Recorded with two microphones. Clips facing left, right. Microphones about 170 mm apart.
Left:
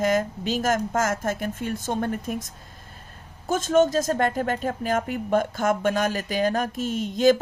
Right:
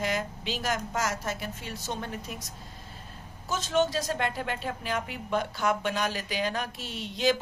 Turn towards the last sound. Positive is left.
turn(degrees=45)  # may be behind; listen again after turning